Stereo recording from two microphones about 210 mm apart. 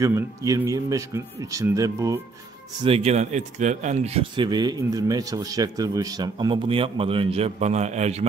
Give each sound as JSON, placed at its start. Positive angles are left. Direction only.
{"t": 0.0, "sound": "speech", "side_deg": -15}
{"t": 2.8, "sound": "speech", "side_deg": -30}